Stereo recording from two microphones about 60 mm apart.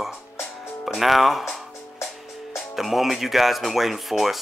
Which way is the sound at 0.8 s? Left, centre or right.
Centre.